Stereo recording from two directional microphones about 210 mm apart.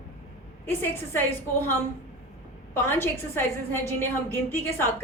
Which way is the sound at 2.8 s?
10° left (ahead or behind).